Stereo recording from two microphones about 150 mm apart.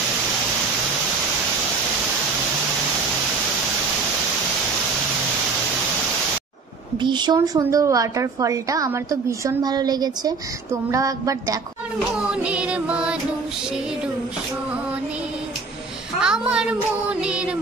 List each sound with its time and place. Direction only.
7.0 s a woman's voice: 30° right (ahead or behind)
12.2 s child singing: 5° right (ahead or behind)
16.2 s a sound: 5° right (ahead or behind)
17.1 s child singing: 5° right (ahead or behind)